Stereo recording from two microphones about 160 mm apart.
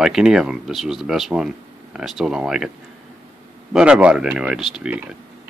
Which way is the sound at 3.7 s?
5° right (ahead or behind).